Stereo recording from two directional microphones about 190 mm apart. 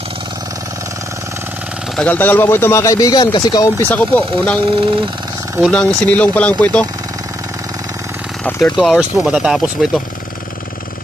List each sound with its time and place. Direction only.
2.0 s speech: 10° left (ahead or behind)
3.9 s speech: 10° left (ahead or behind)
5.6 s speech: 5° left (ahead or behind)
8.5 s speech: 5° left (ahead or behind)